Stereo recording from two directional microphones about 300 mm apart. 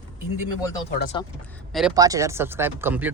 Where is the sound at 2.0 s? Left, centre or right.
Centre.